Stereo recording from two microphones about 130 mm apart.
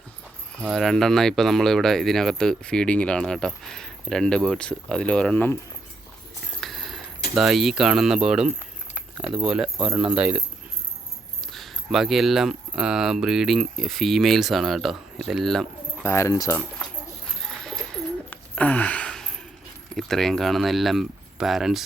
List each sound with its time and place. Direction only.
0.6 s speech: centre (ahead or behind)
6.6 s keys jangling: centre (ahead or behind)
9.4 s speech: 5° right (ahead or behind)
11.5 s speech: centre (ahead or behind)
16.0 s speech: 20° left (ahead or behind)
17.6 s bird: 5° left (ahead or behind)
20.0 s speech: 5° left (ahead or behind)